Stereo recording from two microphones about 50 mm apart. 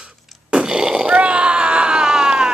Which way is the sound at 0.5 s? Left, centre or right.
Centre.